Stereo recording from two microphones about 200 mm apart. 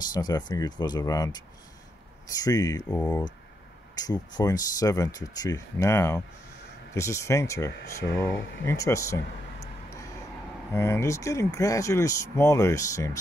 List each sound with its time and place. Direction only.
0.1 s speech: 20° left (ahead or behind)
2.9 s speech: 5° left (ahead or behind)
3.9 s speech: 20° left (ahead or behind)
8.0 s speech: 60° left (ahead or behind)
8.6 s speech: 15° left (ahead or behind)
10.7 s speech: 15° left (ahead or behind)